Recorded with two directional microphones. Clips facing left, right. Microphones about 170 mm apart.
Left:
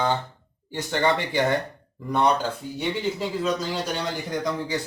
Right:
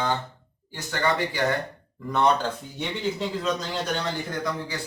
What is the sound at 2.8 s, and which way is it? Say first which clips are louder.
A man's voice: left 2 dB; 5° left (ahead or behind).